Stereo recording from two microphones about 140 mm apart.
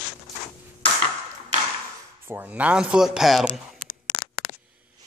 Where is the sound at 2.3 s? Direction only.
15° right (ahead or behind).